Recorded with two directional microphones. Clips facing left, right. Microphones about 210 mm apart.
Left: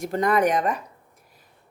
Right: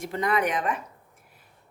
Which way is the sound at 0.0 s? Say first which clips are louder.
Left 5 dB; 45° left (ahead or behind).